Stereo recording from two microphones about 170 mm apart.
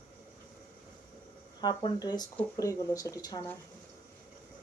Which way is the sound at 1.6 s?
25° left (ahead or behind).